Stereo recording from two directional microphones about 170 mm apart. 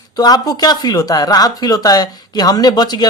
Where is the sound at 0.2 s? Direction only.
25° left (ahead or behind).